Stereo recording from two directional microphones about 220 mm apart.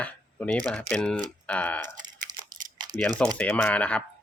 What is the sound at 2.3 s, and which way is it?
Crumpling, 20° right (ahead or behind).